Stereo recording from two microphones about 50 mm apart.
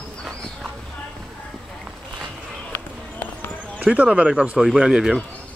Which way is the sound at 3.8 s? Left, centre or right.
Right.